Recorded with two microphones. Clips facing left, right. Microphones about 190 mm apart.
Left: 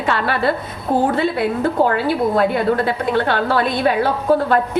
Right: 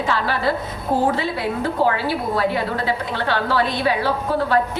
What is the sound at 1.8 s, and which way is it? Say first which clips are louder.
A woman's voice: left 3 dB; 50° left (ahead or behind).